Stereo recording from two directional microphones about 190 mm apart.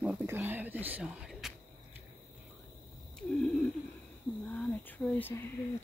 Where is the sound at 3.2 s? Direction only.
5° left (ahead or behind).